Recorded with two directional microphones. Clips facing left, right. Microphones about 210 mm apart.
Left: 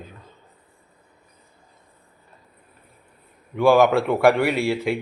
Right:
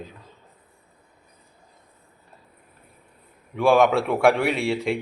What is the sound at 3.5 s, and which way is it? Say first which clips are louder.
A man's voice: left 2 dB; centre (ahead or behind).